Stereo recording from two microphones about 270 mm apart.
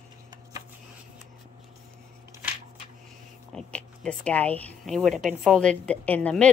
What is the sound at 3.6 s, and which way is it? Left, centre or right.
Speech, centre.